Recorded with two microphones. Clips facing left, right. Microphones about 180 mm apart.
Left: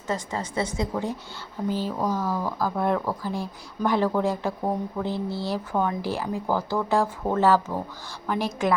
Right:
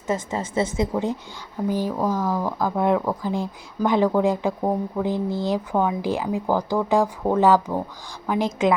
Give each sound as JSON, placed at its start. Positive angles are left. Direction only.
{"t": 0.1, "sound": "a woman's voice", "side_deg": -20}